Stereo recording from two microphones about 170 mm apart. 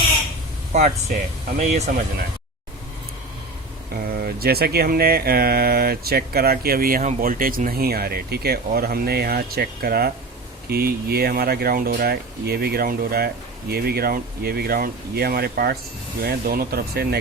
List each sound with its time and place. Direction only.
0.7 s speech: 40° right (ahead or behind)
4.0 s speech: 65° right (ahead or behind)